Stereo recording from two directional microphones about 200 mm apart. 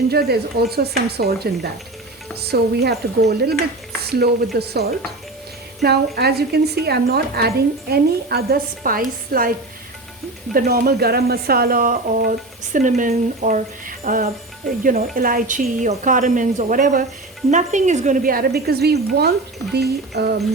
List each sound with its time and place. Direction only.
0.1 s a woman's voice: 50° right (ahead or behind)
10.5 s a woman's voice: 50° right (ahead or behind)